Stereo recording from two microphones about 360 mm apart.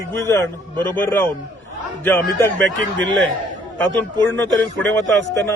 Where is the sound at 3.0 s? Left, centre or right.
Right.